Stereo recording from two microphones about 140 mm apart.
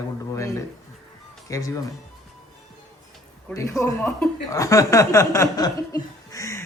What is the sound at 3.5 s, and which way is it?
Chuckle, 20° left (ahead or behind).